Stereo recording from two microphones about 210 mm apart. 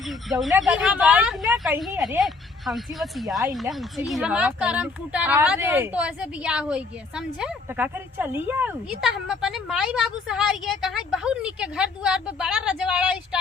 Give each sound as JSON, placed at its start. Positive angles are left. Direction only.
{"t": 0.3, "sound": "a woman's voice", "side_deg": 0}